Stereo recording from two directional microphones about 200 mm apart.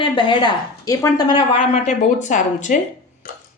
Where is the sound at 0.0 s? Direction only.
25° left (ahead or behind).